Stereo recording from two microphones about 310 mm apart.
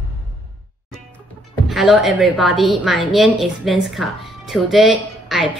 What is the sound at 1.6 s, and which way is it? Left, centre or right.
A woman's voice, centre.